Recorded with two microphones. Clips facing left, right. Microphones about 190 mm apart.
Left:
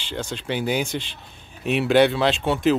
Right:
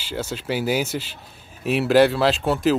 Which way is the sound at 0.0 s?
5° right (ahead or behind).